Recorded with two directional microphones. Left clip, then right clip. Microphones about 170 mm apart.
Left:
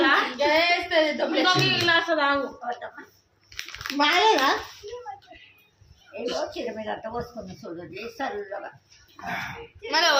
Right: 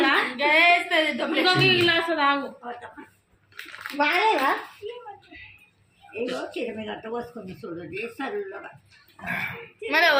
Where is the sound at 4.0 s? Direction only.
15° left (ahead or behind).